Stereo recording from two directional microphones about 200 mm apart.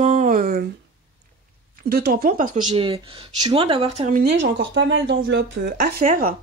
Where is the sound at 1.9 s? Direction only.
50° right (ahead or behind).